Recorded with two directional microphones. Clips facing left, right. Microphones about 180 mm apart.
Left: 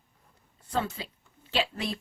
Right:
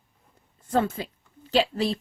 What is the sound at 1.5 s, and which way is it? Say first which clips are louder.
Speech: right 7 dB; 35° right (ahead or behind).